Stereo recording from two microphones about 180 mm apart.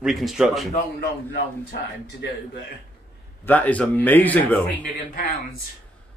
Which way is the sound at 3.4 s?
10° left (ahead or behind).